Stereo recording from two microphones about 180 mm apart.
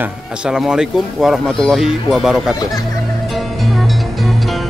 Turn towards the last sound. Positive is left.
turn(degrees=0)  # may be behind; listen again after turning